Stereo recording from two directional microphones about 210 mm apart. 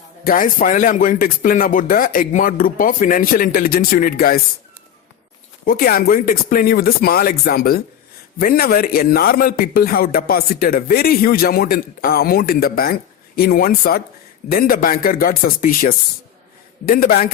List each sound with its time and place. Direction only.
0.3 s speech: 40° left (ahead or behind)
5.6 s a man's voice: 45° left (ahead or behind)